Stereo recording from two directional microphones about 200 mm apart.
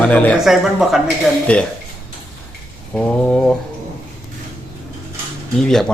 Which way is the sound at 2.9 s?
5° left (ahead or behind).